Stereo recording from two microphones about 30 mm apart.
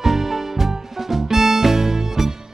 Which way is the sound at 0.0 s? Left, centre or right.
Centre.